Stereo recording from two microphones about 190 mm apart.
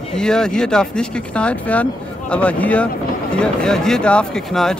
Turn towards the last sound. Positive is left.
turn(degrees=5)  # may be behind; listen again after turning